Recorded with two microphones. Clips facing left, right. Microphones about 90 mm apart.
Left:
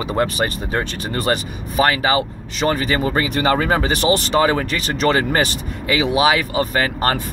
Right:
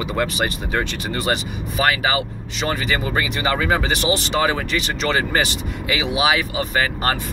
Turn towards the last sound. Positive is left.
turn(degrees=40)  # may be behind; listen again after turning